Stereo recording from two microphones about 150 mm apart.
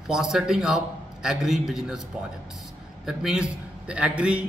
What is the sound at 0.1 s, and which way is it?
A man's voice, 5° right (ahead or behind).